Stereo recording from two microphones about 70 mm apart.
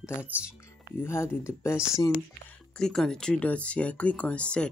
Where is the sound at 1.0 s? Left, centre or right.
Left.